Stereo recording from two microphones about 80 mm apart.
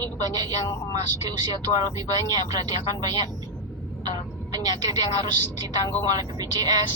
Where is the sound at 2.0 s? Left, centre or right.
Right.